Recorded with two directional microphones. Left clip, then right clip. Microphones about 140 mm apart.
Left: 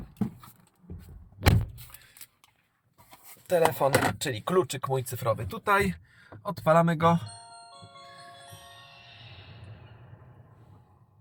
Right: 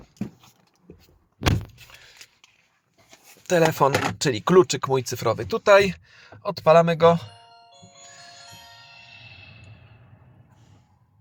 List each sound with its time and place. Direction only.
3.4 s speech: 20° right (ahead or behind)
8.2 s wind chime: 20° right (ahead or behind)